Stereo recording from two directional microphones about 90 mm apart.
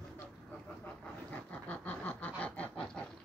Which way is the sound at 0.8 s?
15° left (ahead or behind).